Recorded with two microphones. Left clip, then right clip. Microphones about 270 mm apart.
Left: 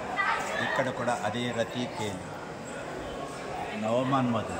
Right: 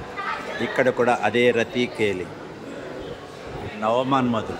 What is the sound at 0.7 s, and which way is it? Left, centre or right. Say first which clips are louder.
Speech: right 13 dB; right.